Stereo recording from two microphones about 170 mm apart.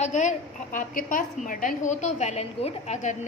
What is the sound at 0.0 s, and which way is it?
A woman's voice, 45° left (ahead or behind).